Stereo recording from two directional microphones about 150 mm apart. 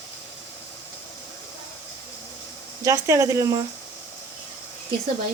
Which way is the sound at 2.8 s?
20° right (ahead or behind).